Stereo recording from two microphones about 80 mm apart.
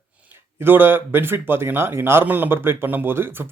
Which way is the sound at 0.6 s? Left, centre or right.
Right.